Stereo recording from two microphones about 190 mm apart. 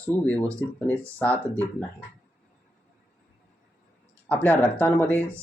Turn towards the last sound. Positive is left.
turn(degrees=10)  # may be behind; listen again after turning